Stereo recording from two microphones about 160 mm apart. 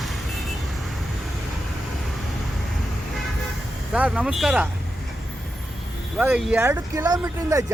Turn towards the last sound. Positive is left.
turn(degrees=-20)  # may be behind; listen again after turning